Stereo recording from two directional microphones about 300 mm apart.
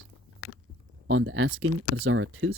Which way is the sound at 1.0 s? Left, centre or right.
Right.